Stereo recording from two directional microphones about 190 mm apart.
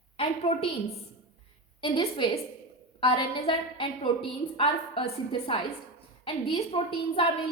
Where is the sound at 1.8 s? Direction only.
25° left (ahead or behind).